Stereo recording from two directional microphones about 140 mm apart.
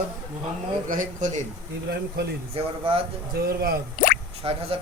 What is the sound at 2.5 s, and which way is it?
Speech, 45° right (ahead or behind).